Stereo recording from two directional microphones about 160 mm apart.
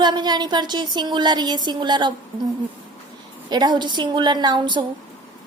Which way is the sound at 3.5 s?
25° right (ahead or behind).